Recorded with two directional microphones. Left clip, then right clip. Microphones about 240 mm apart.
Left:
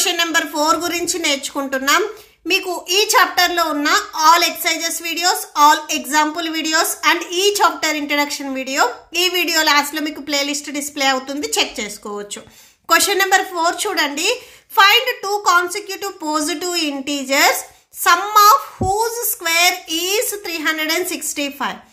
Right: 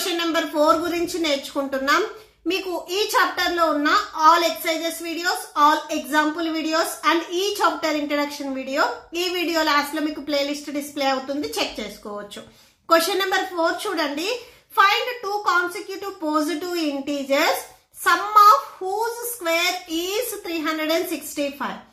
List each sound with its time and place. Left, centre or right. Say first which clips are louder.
0.0 s a child's voice: left 6 dB; left
15.4 s a child's voice: left 6 dB; left